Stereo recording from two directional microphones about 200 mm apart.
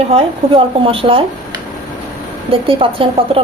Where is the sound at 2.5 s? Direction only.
25° right (ahead or behind).